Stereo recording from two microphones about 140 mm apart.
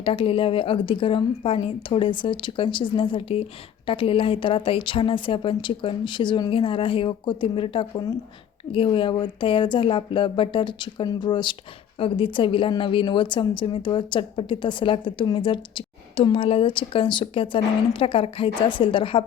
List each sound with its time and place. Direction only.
0.0 s a woman's voice: 40° left (ahead or behind)